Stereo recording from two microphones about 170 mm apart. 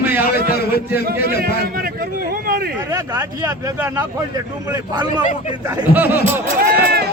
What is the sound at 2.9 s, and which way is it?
Speech, 20° right (ahead or behind).